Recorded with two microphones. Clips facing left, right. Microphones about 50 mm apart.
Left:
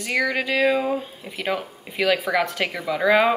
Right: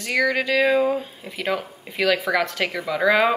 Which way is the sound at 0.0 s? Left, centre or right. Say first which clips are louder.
Right 2 dB; centre.